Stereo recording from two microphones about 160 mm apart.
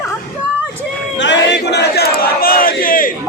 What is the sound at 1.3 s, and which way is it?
Battle cry, 90° left.